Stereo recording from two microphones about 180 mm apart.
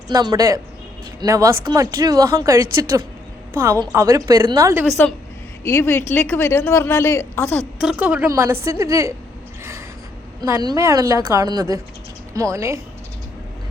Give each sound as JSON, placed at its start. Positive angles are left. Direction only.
{"t": 0.1, "sound": "a woman's voice", "side_deg": -20}
{"t": 5.6, "sound": "a woman's voice", "side_deg": 15}
{"t": 7.8, "sound": "a woman's voice", "side_deg": -5}
{"t": 10.4, "sound": "a woman's voice", "side_deg": -20}